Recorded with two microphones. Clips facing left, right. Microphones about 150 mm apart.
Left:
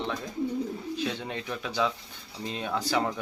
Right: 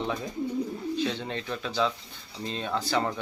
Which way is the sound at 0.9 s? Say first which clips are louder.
Right 3 dB; 10° left (ahead or behind).